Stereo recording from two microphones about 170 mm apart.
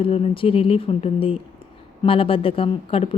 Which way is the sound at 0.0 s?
35° left (ahead or behind).